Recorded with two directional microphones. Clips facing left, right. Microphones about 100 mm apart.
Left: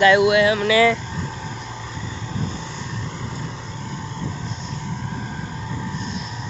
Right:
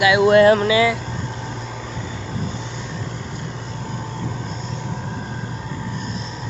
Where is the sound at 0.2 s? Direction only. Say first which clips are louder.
Right 4 dB; 40° right (ahead or behind).